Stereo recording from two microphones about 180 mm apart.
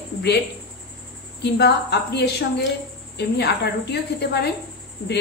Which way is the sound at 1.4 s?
65° left (ahead or behind).